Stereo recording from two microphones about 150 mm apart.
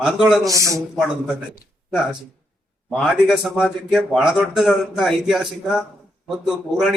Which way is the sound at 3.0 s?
Centre (ahead or behind).